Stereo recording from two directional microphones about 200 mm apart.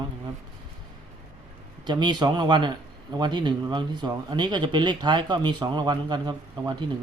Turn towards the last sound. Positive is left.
turn(degrees=-20)  # may be behind; listen again after turning